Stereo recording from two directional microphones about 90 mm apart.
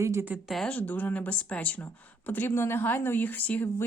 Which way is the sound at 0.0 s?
30° right (ahead or behind).